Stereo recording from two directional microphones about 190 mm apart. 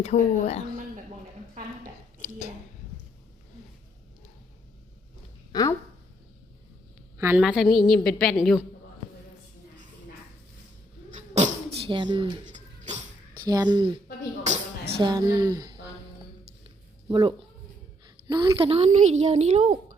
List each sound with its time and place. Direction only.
0.0 s a woman's voice: 35° left (ahead or behind)
5.5 s a sound: 20° left (ahead or behind)
7.2 s a woman's voice: 10° right (ahead or behind)
11.1 s cat: 40° right (ahead or behind)
11.9 s speech: 25° right (ahead or behind)
12.5 s a sound: 40° right (ahead or behind)
13.4 s speech: 20° right (ahead or behind)
14.9 s a woman's voice: 25° right (ahead or behind)
16.6 s a sound: 25° right (ahead or behind)
18.0 s a woman's voice: 20° right (ahead or behind)